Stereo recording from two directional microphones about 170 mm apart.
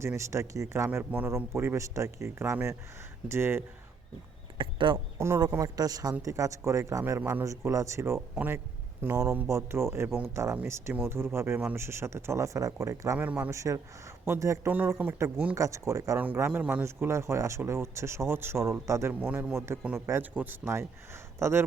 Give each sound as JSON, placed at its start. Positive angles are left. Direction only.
{"t": 0.0, "sound": "speech", "side_deg": -15}
{"t": 4.5, "sound": "speech", "side_deg": -30}
{"t": 5.1, "sound": "a man's voice", "side_deg": -15}
{"t": 15.5, "sound": "speech", "side_deg": -20}